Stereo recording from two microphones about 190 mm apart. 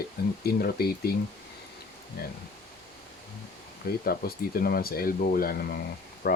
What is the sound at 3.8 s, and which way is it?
Speech, 50° left (ahead or behind).